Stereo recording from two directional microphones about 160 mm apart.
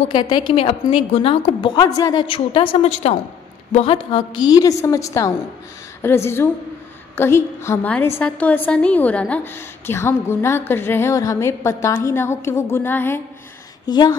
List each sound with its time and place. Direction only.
0.1 s a woman's voice: 30° left (ahead or behind)
2.2 s a woman's voice: 35° left (ahead or behind); by 13.2 s 15° left (ahead or behind)
13.8 s a woman's voice: 25° left (ahead or behind)